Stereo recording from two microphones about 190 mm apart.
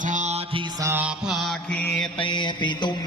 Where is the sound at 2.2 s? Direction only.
25° left (ahead or behind).